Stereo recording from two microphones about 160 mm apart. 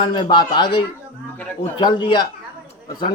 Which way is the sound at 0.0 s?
30° left (ahead or behind).